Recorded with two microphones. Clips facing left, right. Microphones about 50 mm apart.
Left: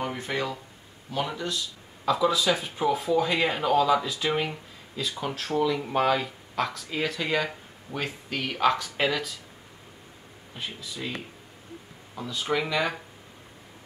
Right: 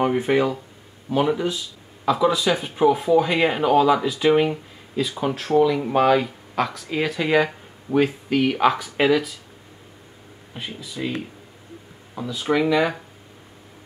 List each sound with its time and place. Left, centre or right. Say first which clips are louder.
0.0 s speech: right 10 dB; right
2.0 s speech: right 4 dB; centre
10.6 s speech: right 6 dB; centre